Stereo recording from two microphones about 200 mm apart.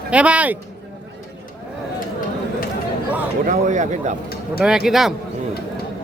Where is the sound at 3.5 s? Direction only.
40° right (ahead or behind).